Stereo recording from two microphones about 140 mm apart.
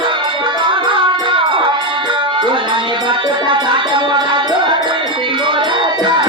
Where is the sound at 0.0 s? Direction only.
35° right (ahead or behind).